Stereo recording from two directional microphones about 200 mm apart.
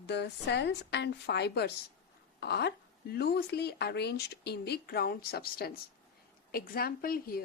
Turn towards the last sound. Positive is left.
turn(degrees=50)  # may be behind; listen again after turning